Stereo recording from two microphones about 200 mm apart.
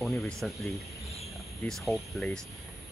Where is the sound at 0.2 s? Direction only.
Centre (ahead or behind).